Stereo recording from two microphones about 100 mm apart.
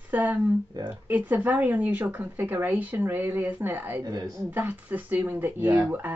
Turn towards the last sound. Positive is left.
turn(degrees=-20)  # may be behind; listen again after turning